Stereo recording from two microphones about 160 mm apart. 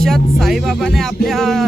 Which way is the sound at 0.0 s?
Centre (ahead or behind).